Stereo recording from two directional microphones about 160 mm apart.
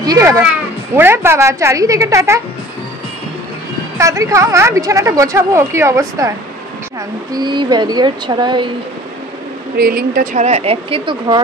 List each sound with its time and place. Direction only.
0.0 s a child's voice: 20° right (ahead or behind)
4.0 s a woman's voice: 20° right (ahead or behind)
7.3 s a woman's voice: 30° right (ahead or behind)
9.8 s speech: 70° right (ahead or behind)
10.4 s speech: 40° right (ahead or behind)